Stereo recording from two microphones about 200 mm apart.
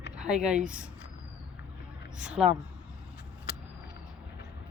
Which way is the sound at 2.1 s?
5° right (ahead or behind).